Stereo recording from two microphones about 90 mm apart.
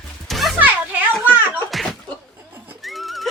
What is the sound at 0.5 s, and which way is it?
Music, 20° right (ahead or behind).